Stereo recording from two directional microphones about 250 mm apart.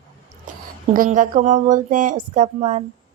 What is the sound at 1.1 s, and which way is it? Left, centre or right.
A woman's voice, right.